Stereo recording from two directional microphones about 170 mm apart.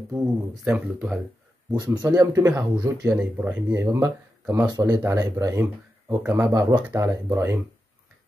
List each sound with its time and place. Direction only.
0.1 s speech: 10° right (ahead or behind)
1.7 s speech: 25° right (ahead or behind)